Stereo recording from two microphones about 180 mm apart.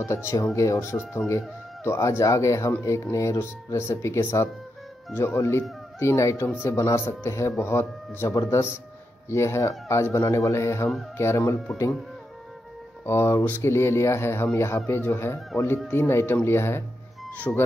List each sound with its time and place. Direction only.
0.0 s speech: 15° left (ahead or behind)
13.0 s speech: 15° left (ahead or behind)